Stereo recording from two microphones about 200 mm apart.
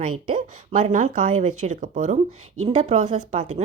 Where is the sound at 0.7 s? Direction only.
40° right (ahead or behind).